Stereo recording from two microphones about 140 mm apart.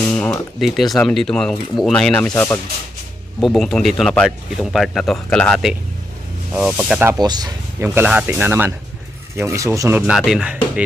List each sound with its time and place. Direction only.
0.1 s a sound: 5° left (ahead or behind)
0.6 s speech: centre (ahead or behind)
3.4 s speech: centre (ahead or behind)
6.5 s speech: 5° right (ahead or behind)
7.2 s speech: 30° right (ahead or behind)
7.8 s speech: 15° right (ahead or behind)
10.1 s speech: 5° right (ahead or behind)